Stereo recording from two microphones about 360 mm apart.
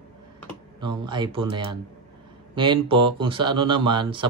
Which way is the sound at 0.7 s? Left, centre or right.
Centre.